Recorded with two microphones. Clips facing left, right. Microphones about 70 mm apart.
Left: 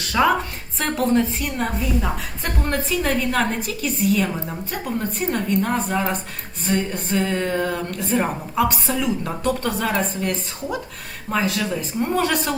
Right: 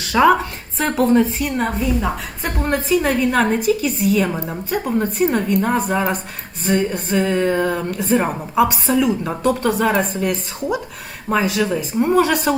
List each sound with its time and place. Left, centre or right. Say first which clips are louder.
0.0 s a woman's voice: right 5 dB; centre
4.3 s a woman's voice: right 4 dB; centre
5.0 s a woman's voice: right 5 dB; centre